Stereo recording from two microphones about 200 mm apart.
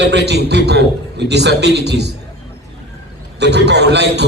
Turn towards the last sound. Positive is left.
turn(degrees=-60)  # may be behind; listen again after turning